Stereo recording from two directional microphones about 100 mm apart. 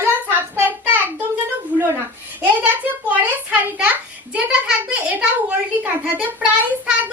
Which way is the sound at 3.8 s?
15° right (ahead or behind).